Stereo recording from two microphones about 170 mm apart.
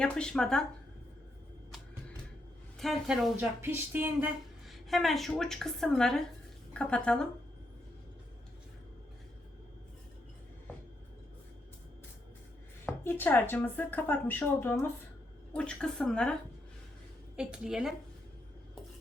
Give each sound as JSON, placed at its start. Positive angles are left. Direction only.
{"t": 0.0, "sound": "a woman's voice", "side_deg": 5}
{"t": 2.7, "sound": "a woman's voice", "side_deg": 0}
{"t": 12.8, "sound": "a woman's voice", "side_deg": 10}
{"t": 17.3, "sound": "a woman's voice", "side_deg": -5}